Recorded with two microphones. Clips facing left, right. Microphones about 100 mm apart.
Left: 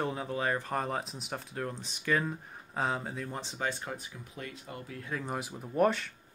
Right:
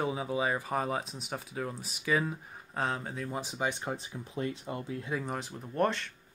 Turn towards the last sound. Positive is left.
turn(degrees=5)  # may be behind; listen again after turning